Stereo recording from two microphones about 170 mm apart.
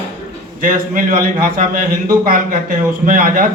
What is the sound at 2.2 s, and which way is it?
Speech, 55° right (ahead or behind).